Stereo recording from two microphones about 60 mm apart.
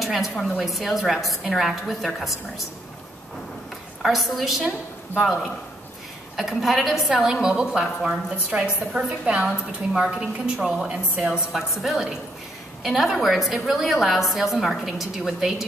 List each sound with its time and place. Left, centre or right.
0.0 s a woman's voice: centre
4.0 s a woman's voice: centre
10.9 s a woman's voice: centre
11.5 s a woman's voice: centre